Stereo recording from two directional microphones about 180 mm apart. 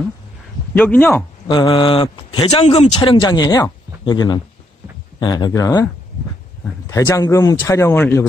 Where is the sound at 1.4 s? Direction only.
25° left (ahead or behind).